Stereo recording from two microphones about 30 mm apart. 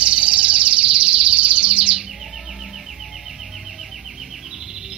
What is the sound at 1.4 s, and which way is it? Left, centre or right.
Chirp, right.